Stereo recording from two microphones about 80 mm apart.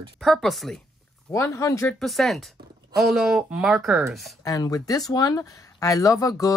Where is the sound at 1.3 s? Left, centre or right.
Left.